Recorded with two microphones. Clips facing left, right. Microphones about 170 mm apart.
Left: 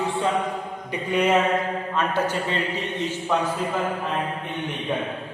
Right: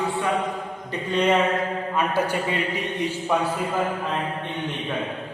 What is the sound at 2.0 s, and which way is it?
A man's voice, 10° right (ahead or behind).